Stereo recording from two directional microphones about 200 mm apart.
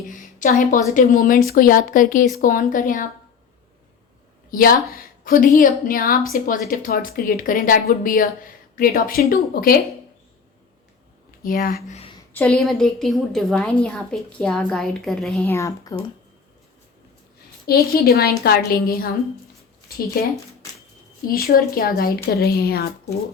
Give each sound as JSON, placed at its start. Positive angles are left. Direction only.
{"t": 0.1, "sound": "a sound", "side_deg": 40}
{"t": 0.9, "sound": "speech", "side_deg": 40}
{"t": 4.5, "sound": "speech", "side_deg": 45}
{"t": 11.3, "sound": "speech", "side_deg": 45}
{"t": 11.9, "sound": "a sound", "side_deg": 25}
{"t": 12.3, "sound": "a woman's voice", "side_deg": 10}
{"t": 15.4, "sound": "speech", "side_deg": 15}
{"t": 17.7, "sound": "speech", "side_deg": 50}
{"t": 21.2, "sound": "speech", "side_deg": 50}